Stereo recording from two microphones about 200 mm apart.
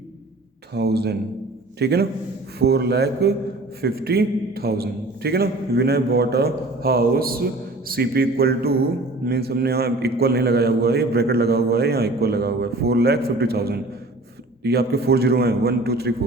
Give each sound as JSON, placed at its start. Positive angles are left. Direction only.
{"t": 0.7, "sound": "a man's voice", "side_deg": -55}